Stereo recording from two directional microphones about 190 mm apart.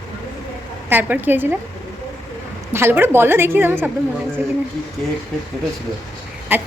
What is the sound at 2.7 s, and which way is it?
A woman's voice, 10° right (ahead or behind).